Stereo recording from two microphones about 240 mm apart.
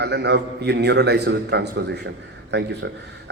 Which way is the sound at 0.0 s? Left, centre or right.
Right.